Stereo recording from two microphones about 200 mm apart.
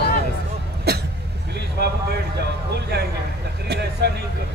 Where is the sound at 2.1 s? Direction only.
55° right (ahead or behind).